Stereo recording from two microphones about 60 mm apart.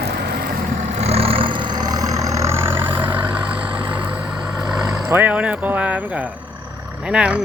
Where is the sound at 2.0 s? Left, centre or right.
Right.